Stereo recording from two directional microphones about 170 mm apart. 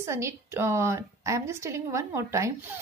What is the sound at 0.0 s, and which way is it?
A woman's voice, 15° right (ahead or behind).